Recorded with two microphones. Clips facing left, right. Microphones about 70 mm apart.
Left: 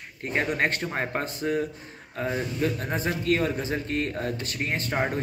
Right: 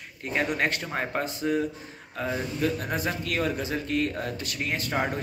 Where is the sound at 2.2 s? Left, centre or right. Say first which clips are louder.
Left 1 dB; left.